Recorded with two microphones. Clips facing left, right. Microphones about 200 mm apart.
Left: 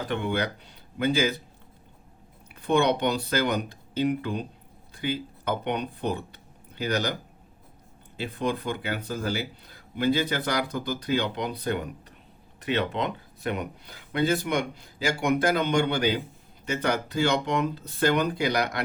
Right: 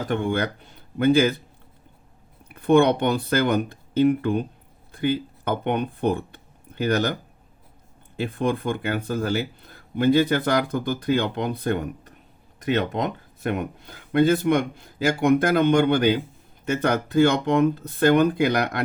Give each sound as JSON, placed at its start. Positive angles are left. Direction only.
{"t": 0.1, "sound": "speech", "side_deg": -50}
{"t": 2.5, "sound": "speech", "side_deg": -55}
{"t": 8.2, "sound": "speech", "side_deg": -55}